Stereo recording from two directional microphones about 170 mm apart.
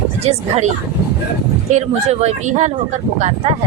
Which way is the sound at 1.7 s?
40° right (ahead or behind).